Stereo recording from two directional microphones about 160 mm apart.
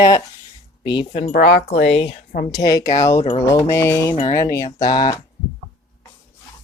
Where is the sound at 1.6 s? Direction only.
40° left (ahead or behind).